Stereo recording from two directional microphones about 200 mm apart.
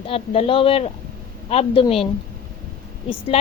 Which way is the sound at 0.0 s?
30° left (ahead or behind).